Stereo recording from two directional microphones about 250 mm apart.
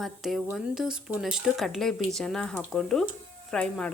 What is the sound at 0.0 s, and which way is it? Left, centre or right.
Speech, centre.